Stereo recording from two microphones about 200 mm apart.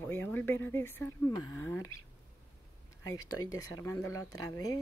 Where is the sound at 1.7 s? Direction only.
90° left.